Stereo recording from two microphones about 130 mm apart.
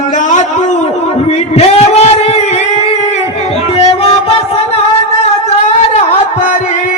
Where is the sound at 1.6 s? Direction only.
55° left (ahead or behind).